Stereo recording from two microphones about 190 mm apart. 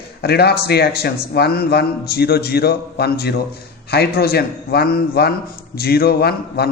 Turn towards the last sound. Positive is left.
turn(degrees=55)  # may be behind; listen again after turning